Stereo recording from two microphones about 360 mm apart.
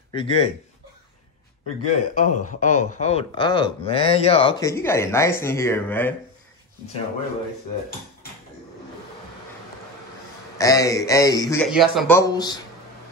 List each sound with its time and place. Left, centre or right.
0.1 s speech: centre
1.8 s speech: centre
10.6 s speech: centre